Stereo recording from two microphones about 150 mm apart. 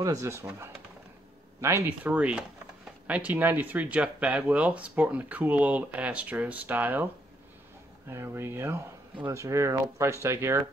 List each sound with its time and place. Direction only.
0.0 s speech: 20° right (ahead or behind)
8.1 s speech: 15° right (ahead or behind)